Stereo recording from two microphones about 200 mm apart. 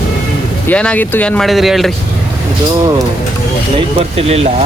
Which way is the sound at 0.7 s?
5° left (ahead or behind).